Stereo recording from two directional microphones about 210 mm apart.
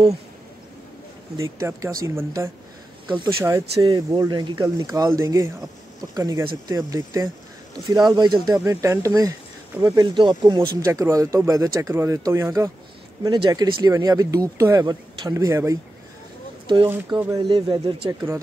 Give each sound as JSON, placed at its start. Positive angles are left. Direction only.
{"t": 1.4, "sound": "speech", "side_deg": -15}
{"t": 3.7, "sound": "speech", "side_deg": -25}
{"t": 16.8, "sound": "speech", "side_deg": -10}